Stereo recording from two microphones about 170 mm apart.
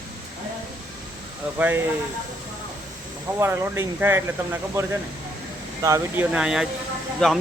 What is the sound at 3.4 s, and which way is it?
Speech, 15° right (ahead or behind).